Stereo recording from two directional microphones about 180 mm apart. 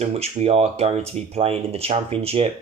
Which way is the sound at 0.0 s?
35° right (ahead or behind).